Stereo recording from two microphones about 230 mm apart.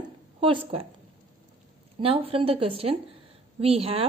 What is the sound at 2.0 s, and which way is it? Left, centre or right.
A woman's voice, right.